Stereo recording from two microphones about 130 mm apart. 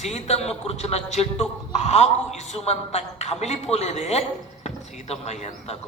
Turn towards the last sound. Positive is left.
turn(degrees=60)  # may be behind; listen again after turning